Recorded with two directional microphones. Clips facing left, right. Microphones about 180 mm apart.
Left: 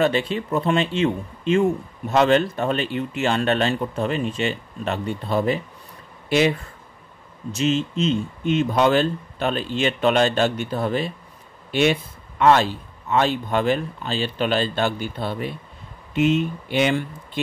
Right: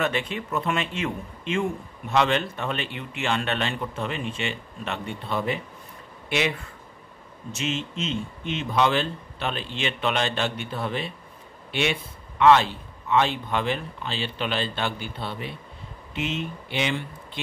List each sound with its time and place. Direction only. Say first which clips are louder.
0.0 s speech: left 6 dB; 30° left (ahead or behind)
7.5 s a man's voice: left 8 dB; 35° left (ahead or behind)